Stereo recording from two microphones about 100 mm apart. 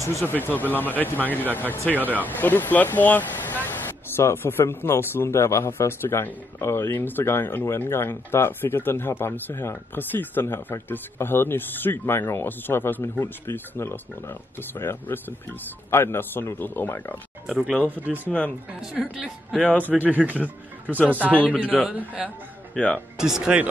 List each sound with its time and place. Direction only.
0.0 s speech: 25° left (ahead or behind)
2.0 s speech: 15° right (ahead or behind)
2.2 s speech: 20° left (ahead or behind)
17.5 s speech: 5° right (ahead or behind)
17.7 s speech: 15° left (ahead or behind)
18.0 s speech: 20° right (ahead or behind)
18.7 s speech: 5° right (ahead or behind)
19.6 s speech: 15° left (ahead or behind)
19.9 s speech: 15° right (ahead or behind)
21.2 s speech: 15° left (ahead or behind)
21.5 s speech: 15° right (ahead or behind)
22.8 s speech: 15° left (ahead or behind)
23.1 s speech: 5° right (ahead or behind)